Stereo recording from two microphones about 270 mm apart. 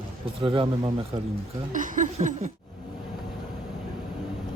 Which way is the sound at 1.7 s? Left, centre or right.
Right.